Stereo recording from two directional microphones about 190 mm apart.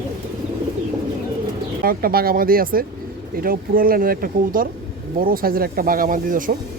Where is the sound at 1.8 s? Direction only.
50° right (ahead or behind).